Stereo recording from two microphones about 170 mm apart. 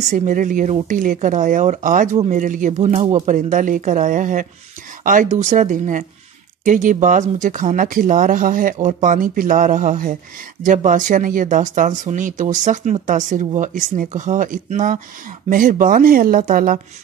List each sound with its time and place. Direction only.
0.1 s speech: 50° right (ahead or behind)